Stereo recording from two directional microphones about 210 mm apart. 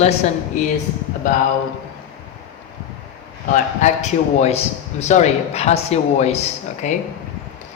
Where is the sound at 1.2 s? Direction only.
40° left (ahead or behind).